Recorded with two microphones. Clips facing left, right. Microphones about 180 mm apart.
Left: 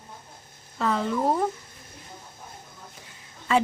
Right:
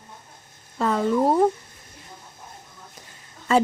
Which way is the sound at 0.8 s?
45° right (ahead or behind).